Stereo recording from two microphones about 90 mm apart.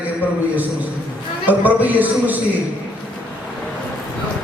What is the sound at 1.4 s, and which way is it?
Speech, 20° right (ahead or behind).